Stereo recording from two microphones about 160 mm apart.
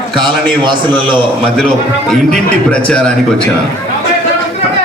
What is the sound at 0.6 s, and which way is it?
Speech, 30° right (ahead or behind).